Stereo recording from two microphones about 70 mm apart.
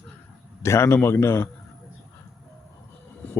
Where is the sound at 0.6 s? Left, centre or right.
Left.